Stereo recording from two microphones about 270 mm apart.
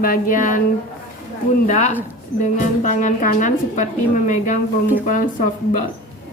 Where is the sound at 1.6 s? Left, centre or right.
Left.